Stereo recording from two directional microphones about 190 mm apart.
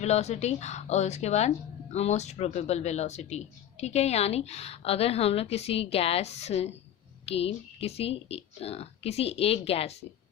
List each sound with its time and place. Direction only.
0.0 s speech: 35° left (ahead or behind)